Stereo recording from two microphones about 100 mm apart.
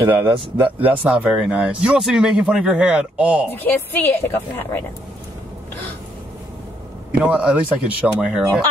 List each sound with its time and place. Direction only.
0.0 s speech: 20° right (ahead or behind)
0.6 s speech: 65° right (ahead or behind)
0.8 s a man's voice: 15° right (ahead or behind)
3.5 s a woman's voice: 20° left (ahead or behind)
7.2 s a man's voice: 10° right (ahead or behind)